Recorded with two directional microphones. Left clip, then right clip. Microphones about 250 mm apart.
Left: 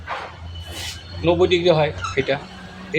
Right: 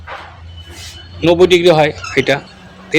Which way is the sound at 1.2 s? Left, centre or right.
Right.